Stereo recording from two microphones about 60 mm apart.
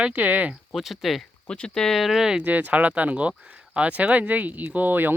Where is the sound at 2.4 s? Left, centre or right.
Right.